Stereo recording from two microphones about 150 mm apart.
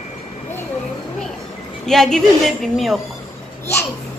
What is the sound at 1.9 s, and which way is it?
A woman's voice, 5° left (ahead or behind).